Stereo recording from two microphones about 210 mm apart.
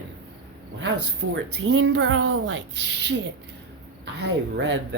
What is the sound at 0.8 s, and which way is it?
Speech, 75° right (ahead or behind).